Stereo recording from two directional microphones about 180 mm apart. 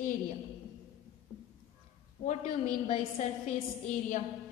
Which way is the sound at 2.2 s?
40° left (ahead or behind).